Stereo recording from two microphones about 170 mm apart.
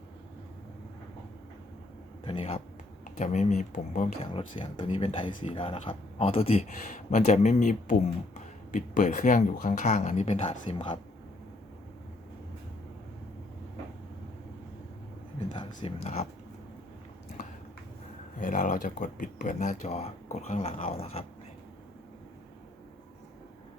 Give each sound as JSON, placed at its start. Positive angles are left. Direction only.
{"t": 2.2, "sound": "speech", "side_deg": 35}
{"t": 4.2, "sound": "speech", "side_deg": 35}
{"t": 15.5, "sound": "speech", "side_deg": 35}
{"t": 18.3, "sound": "speech", "side_deg": 50}